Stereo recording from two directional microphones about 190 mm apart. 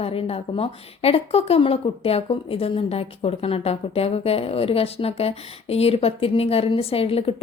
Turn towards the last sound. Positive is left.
turn(degrees=30)  # may be behind; listen again after turning